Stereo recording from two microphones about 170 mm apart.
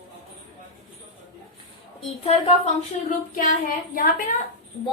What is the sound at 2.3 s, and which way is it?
Speech, 35° left (ahead or behind).